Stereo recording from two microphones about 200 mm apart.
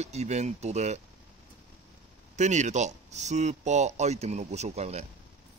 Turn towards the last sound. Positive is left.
turn(degrees=-30)  # may be behind; listen again after turning